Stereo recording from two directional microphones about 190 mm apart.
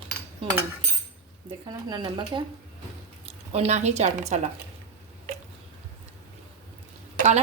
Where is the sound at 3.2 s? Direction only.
35° right (ahead or behind).